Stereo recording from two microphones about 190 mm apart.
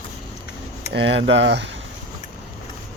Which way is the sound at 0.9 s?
65° right (ahead or behind).